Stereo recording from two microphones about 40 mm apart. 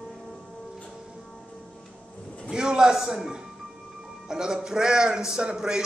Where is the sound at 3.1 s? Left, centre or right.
Centre.